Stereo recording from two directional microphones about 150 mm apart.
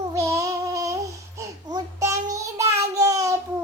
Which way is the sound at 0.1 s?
20° right (ahead or behind).